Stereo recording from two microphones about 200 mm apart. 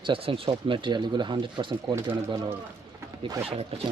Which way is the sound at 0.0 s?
25° right (ahead or behind).